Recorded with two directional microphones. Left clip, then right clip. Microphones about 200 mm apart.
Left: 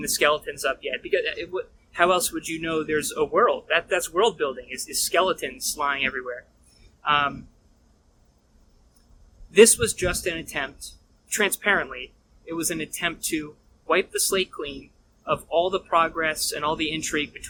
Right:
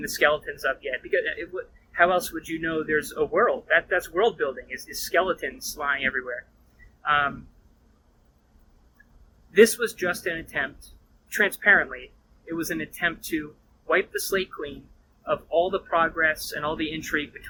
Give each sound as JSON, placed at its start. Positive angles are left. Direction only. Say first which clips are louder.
{"t": 0.0, "sound": "a man's voice", "louder": "left 1 dB", "side_deg": 20}
{"t": 9.5, "sound": "a man's voice", "louder": "left 2 dB", "side_deg": 20}